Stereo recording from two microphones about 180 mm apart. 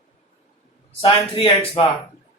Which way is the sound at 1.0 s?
30° left (ahead or behind).